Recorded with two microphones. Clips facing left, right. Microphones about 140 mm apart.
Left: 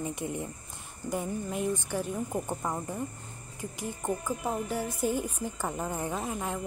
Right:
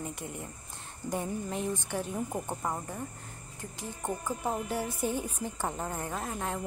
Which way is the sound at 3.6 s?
10° left (ahead or behind).